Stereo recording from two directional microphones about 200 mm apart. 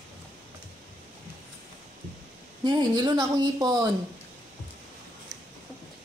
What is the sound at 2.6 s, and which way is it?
Speech, 20° right (ahead or behind).